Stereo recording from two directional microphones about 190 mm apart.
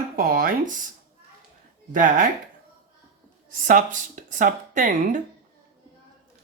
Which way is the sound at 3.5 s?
45° right (ahead or behind).